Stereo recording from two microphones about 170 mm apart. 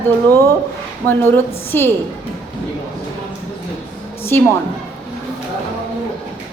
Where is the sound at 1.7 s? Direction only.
15° left (ahead or behind).